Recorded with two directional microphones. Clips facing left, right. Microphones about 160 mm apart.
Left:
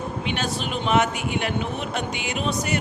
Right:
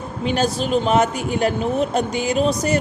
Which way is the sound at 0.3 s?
40° right (ahead or behind).